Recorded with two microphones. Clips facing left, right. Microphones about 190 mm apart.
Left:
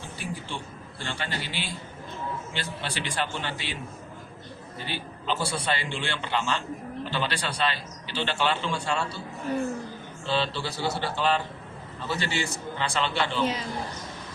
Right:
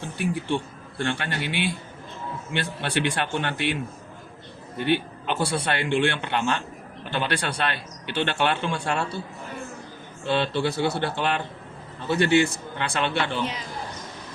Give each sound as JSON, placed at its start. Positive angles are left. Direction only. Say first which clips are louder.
{"t": 0.2, "sound": "a man's voice", "louder": "right 10 dB", "side_deg": -60}
{"t": 4.8, "sound": "a man's voice", "louder": "right 13 dB", "side_deg": -60}
{"t": 10.2, "sound": "a man's voice", "louder": "right 5 dB", "side_deg": -55}